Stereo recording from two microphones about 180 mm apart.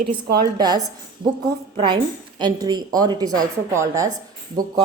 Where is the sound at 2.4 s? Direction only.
25° right (ahead or behind).